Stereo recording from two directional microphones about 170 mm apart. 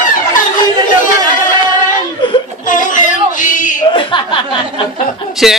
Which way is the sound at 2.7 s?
50° left (ahead or behind).